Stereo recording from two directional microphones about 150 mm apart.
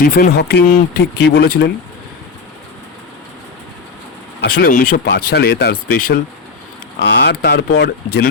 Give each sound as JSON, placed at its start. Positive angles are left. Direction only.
{"t": 0.0, "sound": "speech", "side_deg": 75}
{"t": 4.4, "sound": "speech", "side_deg": 90}
{"t": 5.9, "sound": "speech", "side_deg": 75}
{"t": 7.4, "sound": "speech", "side_deg": 90}